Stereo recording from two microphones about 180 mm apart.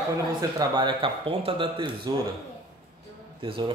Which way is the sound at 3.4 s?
25° right (ahead or behind).